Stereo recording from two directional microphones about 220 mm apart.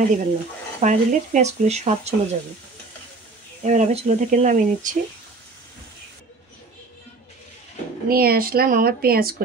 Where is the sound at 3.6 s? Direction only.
30° right (ahead or behind).